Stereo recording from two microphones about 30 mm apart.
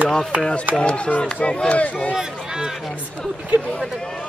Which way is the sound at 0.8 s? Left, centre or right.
Left.